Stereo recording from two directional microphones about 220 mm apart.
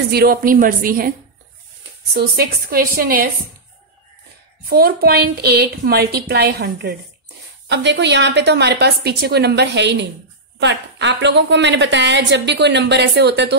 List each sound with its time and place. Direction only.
0.1 s a woman's voice: 45° right (ahead or behind)
2.1 s a woman's voice: 45° right (ahead or behind)
4.6 s a woman's voice: 45° right (ahead or behind)